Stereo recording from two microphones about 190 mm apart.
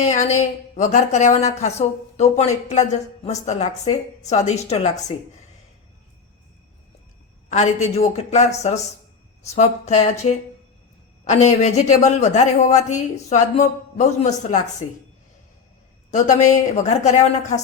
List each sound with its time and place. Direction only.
0.0 s a woman's voice: 35° left (ahead or behind)
7.5 s a woman's voice: 35° left (ahead or behind)
16.1 s a woman's voice: 40° left (ahead or behind)